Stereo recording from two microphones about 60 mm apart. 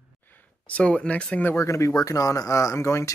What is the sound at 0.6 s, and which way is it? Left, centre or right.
Speech, left.